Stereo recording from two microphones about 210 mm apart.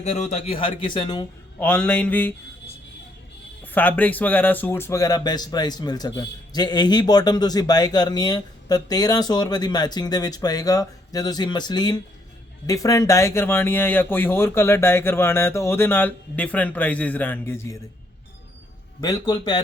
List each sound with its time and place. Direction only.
0.0 s speech: 30° left (ahead or behind)
1.5 s speech: 5° left (ahead or behind)
3.6 s speech: 10° left (ahead or behind)
19.0 s speech: 15° left (ahead or behind)